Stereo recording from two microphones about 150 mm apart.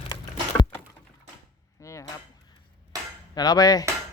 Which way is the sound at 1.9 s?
20° left (ahead or behind).